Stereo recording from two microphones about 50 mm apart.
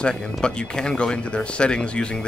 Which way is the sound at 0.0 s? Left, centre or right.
Centre.